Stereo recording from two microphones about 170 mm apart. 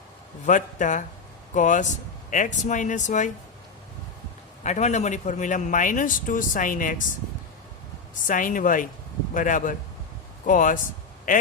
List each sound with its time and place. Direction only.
0.4 s a man's voice: 50° left (ahead or behind)
4.6 s a man's voice: 45° left (ahead or behind)
8.3 s a man's voice: 50° left (ahead or behind)